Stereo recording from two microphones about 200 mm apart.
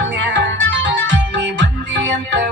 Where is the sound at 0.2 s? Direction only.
65° right (ahead or behind).